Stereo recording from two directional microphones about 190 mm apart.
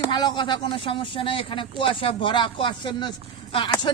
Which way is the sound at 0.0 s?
20° left (ahead or behind).